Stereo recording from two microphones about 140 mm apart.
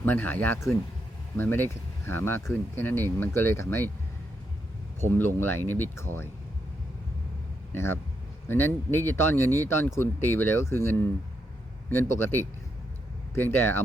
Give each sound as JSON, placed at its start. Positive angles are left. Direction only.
{"t": 0.0, "sound": "speech", "side_deg": 15}
{"t": 4.9, "sound": "speech", "side_deg": 15}
{"t": 7.7, "sound": "a man's voice", "side_deg": 15}
{"t": 12.2, "sound": "speech", "side_deg": 15}